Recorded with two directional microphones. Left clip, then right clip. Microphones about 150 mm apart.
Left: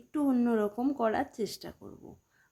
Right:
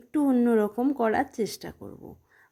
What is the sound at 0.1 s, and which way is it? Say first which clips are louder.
A woman's voice: right 6 dB; 25° right (ahead or behind).